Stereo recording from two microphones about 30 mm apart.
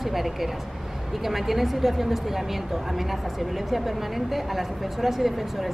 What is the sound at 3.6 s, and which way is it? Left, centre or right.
A woman's voice, centre.